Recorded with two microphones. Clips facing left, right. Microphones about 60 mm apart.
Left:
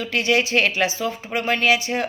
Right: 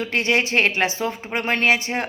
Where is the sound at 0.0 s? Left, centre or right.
Right.